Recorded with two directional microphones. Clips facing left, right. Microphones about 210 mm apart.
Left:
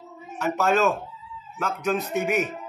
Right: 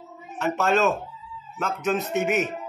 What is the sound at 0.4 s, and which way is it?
Speech, centre (ahead or behind).